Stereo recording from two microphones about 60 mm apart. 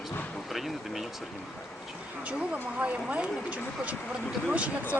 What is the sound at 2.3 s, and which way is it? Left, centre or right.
Speech, right.